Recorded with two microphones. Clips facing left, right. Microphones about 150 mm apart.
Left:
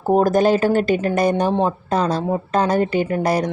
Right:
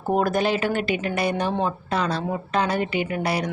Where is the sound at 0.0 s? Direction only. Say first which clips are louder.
Left 6 dB; 40° left (ahead or behind).